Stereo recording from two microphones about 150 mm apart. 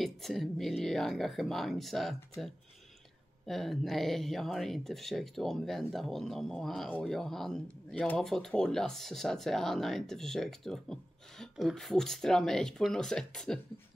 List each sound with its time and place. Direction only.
0.0 s speech: centre (ahead or behind)
3.4 s speech: centre (ahead or behind)